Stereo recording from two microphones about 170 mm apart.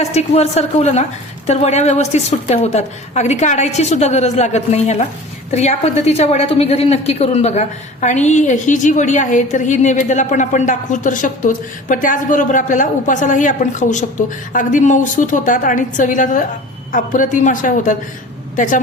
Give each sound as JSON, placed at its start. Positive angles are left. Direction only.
{"t": 0.0, "sound": "a woman's voice", "side_deg": 40}